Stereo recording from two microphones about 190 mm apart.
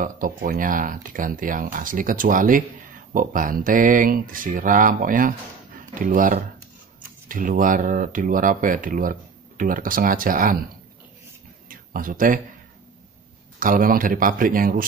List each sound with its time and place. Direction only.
0.0 s speech: 45° right (ahead or behind)
11.7 s a sound: 45° right (ahead or behind)
13.6 s speech: 45° right (ahead or behind)